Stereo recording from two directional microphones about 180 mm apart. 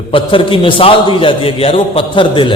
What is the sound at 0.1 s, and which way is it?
A man's voice, 30° left (ahead or behind).